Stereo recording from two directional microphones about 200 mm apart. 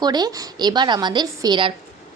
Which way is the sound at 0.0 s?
20° right (ahead or behind).